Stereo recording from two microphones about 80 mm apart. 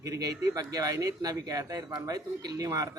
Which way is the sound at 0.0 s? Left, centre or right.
Right.